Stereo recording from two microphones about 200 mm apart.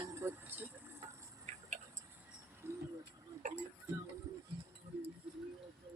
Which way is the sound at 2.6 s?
10° right (ahead or behind).